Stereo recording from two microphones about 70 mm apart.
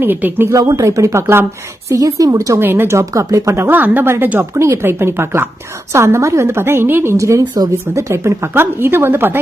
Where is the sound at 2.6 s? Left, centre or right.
Right.